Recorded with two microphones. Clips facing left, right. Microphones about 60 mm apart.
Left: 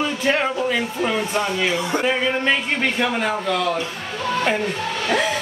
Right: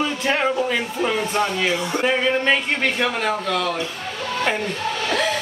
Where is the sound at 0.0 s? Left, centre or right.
Centre.